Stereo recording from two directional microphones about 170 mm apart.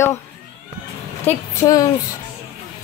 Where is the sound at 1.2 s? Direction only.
20° left (ahead or behind).